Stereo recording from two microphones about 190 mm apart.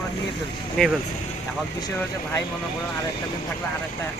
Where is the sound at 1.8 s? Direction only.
15° left (ahead or behind).